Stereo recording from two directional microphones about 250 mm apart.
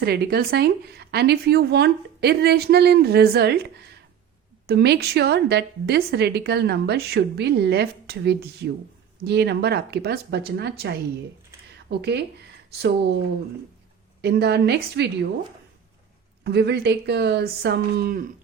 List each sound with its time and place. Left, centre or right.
0.0 s a woman's voice: right
14.2 s a woman's voice: right
16.4 s a woman's voice: right